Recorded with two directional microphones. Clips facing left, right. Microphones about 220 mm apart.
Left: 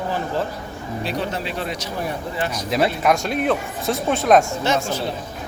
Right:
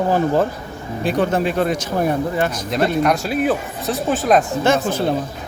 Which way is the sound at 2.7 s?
Centre (ahead or behind).